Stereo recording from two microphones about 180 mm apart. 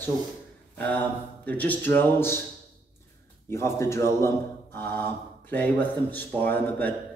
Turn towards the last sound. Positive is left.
turn(degrees=10)  # may be behind; listen again after turning